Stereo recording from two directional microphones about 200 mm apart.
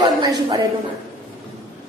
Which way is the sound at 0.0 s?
20° right (ahead or behind).